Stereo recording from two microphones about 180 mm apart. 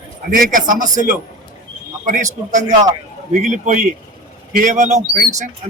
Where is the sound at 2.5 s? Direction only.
45° right (ahead or behind).